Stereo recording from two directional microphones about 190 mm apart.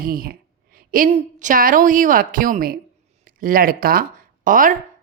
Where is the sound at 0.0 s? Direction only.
50° right (ahead or behind).